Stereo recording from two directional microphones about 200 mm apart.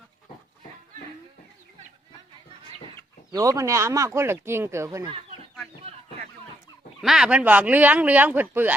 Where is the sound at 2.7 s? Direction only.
25° left (ahead or behind).